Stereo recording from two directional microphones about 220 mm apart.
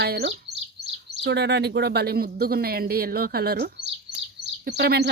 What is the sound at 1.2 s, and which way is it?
Speech, 50° right (ahead or behind).